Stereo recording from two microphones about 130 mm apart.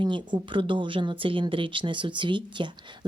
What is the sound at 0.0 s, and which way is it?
Speech, 35° right (ahead or behind).